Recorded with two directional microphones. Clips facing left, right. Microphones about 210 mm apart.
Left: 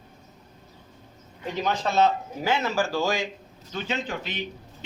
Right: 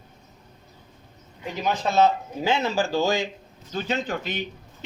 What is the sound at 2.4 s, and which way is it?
Speech, 25° right (ahead or behind).